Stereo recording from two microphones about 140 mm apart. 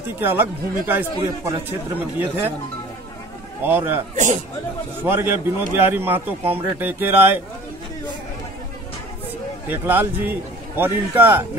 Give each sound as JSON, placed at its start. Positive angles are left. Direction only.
{"t": 0.2, "sound": "a man's voice", "side_deg": -15}
{"t": 3.6, "sound": "a man's voice", "side_deg": -15}
{"t": 4.1, "sound": "a man's voice", "side_deg": -60}
{"t": 5.0, "sound": "a man's voice", "side_deg": -15}
{"t": 9.7, "sound": "a man's voice", "side_deg": -15}